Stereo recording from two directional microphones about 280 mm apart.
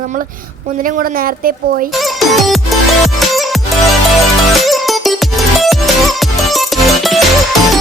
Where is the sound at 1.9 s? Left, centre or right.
Centre.